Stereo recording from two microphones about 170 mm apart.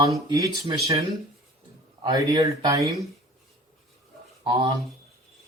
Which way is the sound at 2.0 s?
20° right (ahead or behind).